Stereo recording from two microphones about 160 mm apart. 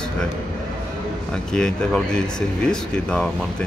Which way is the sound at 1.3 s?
5° left (ahead or behind).